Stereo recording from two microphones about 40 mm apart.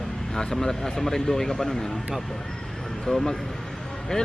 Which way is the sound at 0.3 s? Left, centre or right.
Centre.